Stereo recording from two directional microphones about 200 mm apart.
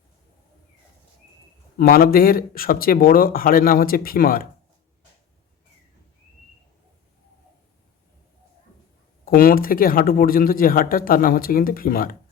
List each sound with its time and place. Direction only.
1.8 s speech: 45° left (ahead or behind)
9.2 s speech: 45° left (ahead or behind)